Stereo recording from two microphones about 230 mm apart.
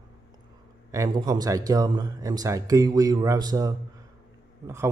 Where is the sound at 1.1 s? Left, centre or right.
Centre.